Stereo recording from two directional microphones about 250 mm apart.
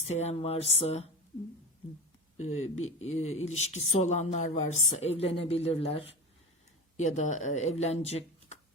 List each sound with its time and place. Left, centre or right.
0.1 s a woman's voice: left
2.4 s a woman's voice: left
2.7 s speech: left
3.4 s a woman's voice: left